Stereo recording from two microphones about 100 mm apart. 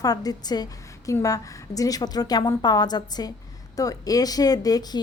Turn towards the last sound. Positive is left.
turn(degrees=40)  # may be behind; listen again after turning